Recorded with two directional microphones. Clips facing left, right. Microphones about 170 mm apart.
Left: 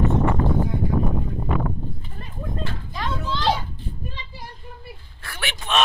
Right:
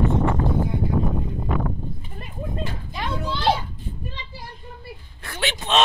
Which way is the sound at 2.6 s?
15° right (ahead or behind).